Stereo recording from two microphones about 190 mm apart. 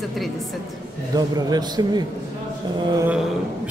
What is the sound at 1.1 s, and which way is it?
Speech, 20° right (ahead or behind).